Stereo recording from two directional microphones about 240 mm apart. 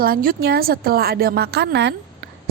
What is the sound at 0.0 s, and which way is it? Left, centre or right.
A woman's voice, right.